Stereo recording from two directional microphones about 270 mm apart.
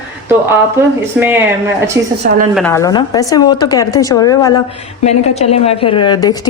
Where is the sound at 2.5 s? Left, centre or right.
Centre.